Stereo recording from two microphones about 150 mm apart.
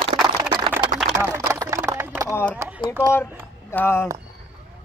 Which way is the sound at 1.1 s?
20° right (ahead or behind).